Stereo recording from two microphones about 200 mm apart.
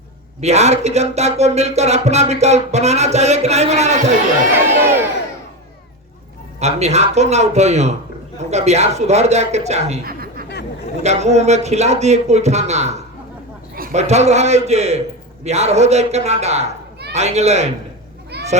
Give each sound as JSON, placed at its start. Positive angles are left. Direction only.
{"t": 0.4, "sound": "speech", "side_deg": -35}
{"t": 4.5, "sound": "crowd", "side_deg": -10}
{"t": 6.6, "sound": "speech", "side_deg": -35}
{"t": 10.0, "sound": "chuckle", "side_deg": -50}
{"t": 11.0, "sound": "speech", "side_deg": -35}
{"t": 18.3, "sound": "a sound", "side_deg": -55}